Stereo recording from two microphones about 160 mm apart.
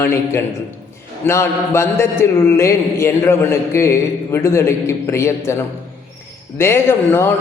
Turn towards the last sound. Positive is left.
turn(degrees=15)  # may be behind; listen again after turning